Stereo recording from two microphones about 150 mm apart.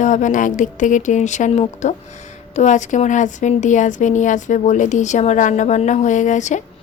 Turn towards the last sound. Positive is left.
turn(degrees=55)  # may be behind; listen again after turning